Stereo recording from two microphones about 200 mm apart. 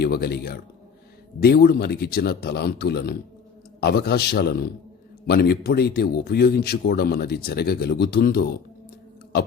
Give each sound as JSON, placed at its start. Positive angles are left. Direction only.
{"t": 0.0, "sound": "speech", "side_deg": 50}